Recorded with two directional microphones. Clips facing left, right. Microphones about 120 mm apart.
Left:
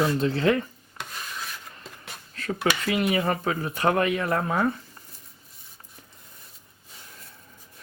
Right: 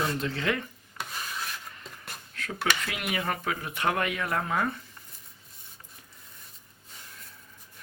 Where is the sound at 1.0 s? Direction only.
Centre (ahead or behind).